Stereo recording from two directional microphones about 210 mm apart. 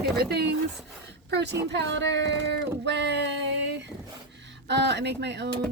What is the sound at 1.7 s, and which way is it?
Female singing, 55° right (ahead or behind).